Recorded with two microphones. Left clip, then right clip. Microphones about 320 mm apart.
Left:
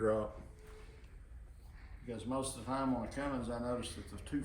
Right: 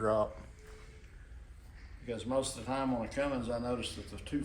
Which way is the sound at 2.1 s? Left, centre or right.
Centre.